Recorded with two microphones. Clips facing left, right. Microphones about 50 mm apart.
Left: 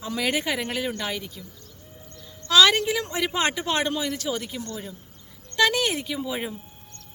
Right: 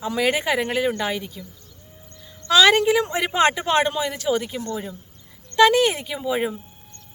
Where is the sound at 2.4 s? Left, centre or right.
Right.